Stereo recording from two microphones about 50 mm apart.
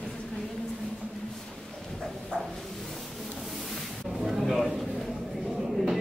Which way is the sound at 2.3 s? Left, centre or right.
Left.